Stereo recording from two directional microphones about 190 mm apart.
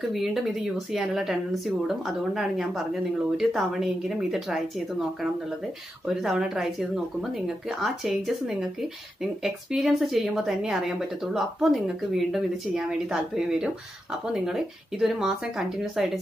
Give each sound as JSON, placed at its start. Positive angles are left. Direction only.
{"t": 0.1, "sound": "speech", "side_deg": 0}